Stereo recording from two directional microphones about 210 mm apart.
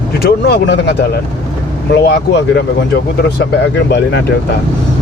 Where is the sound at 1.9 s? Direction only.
50° left (ahead or behind).